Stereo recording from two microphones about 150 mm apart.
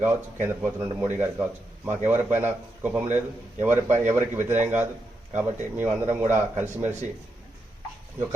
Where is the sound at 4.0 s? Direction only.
55° right (ahead or behind).